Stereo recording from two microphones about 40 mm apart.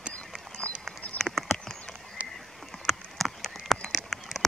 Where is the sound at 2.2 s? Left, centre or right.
Right.